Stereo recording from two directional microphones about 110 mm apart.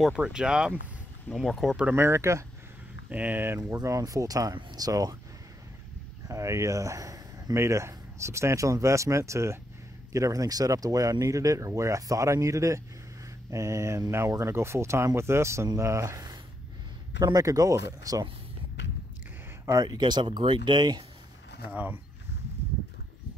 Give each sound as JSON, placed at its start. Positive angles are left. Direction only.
{"t": 0.0, "sound": "speech", "side_deg": -5}
{"t": 1.9, "sound": "speech", "side_deg": -20}
{"t": 3.7, "sound": "speech", "side_deg": -30}
{"t": 6.2, "sound": "speech", "side_deg": -25}
{"t": 19.6, "sound": "speech", "side_deg": -30}
{"t": 21.6, "sound": "speech", "side_deg": -15}